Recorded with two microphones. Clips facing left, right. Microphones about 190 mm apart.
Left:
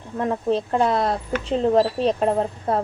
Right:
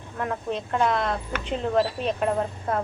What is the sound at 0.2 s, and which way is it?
A woman's voice, 30° left (ahead or behind).